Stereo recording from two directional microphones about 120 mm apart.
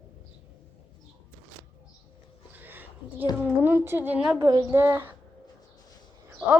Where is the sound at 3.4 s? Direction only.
20° right (ahead or behind).